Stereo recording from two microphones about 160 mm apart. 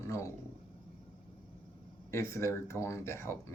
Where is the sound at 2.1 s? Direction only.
15° left (ahead or behind).